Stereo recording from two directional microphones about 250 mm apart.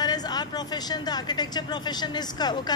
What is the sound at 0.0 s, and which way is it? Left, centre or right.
A woman's voice, centre.